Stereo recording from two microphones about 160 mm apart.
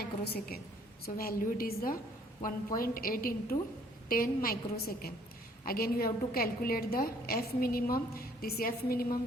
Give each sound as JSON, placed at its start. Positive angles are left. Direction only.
{"t": 0.0, "sound": "a woman's voice", "side_deg": 70}